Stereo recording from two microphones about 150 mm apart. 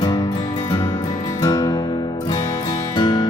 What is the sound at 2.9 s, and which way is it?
Music, 25° left (ahead or behind).